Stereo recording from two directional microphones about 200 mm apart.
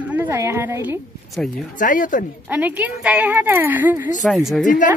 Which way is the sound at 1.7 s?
40° left (ahead or behind).